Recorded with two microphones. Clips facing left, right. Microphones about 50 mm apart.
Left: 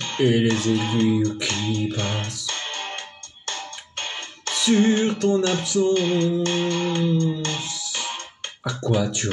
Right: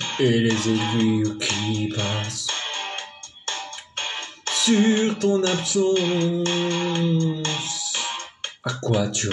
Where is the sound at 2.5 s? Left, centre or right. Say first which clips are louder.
Right 2 dB; right.